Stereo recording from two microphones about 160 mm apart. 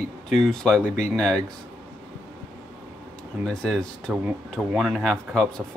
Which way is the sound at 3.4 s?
5° left (ahead or behind).